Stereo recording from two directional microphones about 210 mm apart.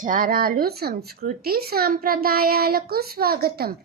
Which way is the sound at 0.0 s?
40° right (ahead or behind).